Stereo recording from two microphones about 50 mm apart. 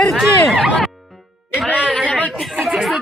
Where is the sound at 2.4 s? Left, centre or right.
Centre.